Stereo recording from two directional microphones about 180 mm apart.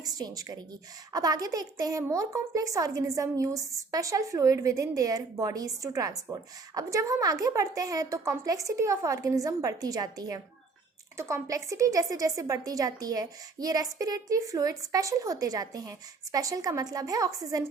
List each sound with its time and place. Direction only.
0.0 s a woman's voice: 20° right (ahead or behind)